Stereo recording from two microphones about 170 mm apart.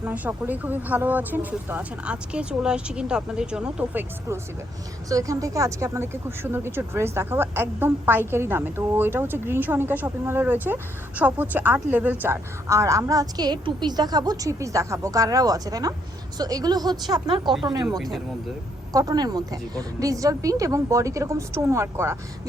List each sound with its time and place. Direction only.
0.0 s a woman's voice: 10° right (ahead or behind)
5.0 s a woman's voice: 20° right (ahead or behind)
17.8 s speech: centre (ahead or behind)
18.9 s a woman's voice: 20° right (ahead or behind)